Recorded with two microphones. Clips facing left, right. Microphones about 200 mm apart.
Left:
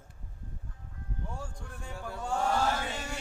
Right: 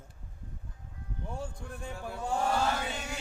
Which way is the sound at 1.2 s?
20° right (ahead or behind).